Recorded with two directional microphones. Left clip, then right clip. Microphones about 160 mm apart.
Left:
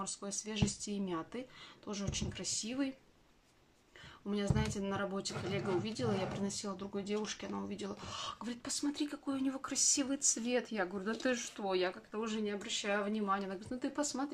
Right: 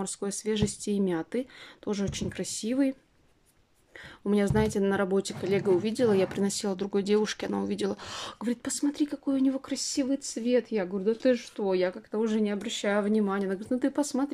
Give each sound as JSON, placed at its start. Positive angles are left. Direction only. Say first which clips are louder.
{"t": 0.0, "sound": "a woman's voice", "louder": "right 9 dB", "side_deg": -55}
{"t": 4.3, "sound": "a woman's voice", "louder": "right 12 dB", "side_deg": -55}